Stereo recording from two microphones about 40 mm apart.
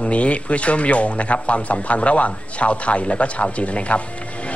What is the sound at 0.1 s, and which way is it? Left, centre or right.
Speech, left.